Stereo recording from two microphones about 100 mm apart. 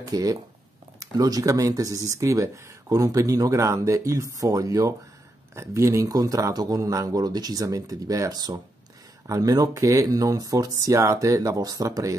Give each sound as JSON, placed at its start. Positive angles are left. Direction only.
{"t": 0.0, "sound": "speech", "side_deg": -40}